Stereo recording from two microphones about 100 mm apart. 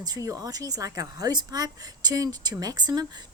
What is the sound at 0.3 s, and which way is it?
Speech, 35° right (ahead or behind).